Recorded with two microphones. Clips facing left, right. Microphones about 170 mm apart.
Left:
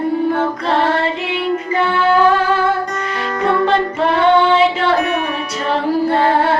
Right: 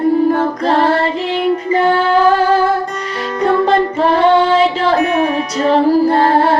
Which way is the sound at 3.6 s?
35° right (ahead or behind).